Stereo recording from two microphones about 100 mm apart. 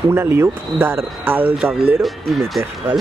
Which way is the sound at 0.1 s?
25° right (ahead or behind).